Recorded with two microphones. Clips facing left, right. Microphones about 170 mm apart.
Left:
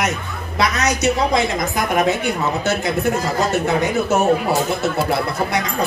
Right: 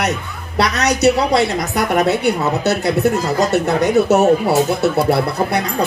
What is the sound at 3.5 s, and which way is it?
Speech, 40° right (ahead or behind).